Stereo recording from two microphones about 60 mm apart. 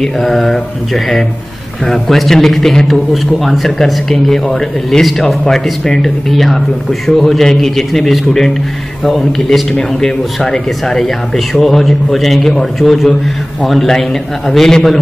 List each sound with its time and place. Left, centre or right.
0.0 s speech: centre